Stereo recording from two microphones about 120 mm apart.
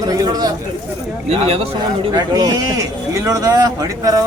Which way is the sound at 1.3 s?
55° right (ahead or behind).